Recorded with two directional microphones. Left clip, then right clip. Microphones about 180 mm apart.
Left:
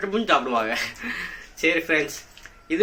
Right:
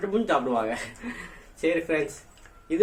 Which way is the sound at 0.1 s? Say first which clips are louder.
Left 4 dB; 15° right (ahead or behind).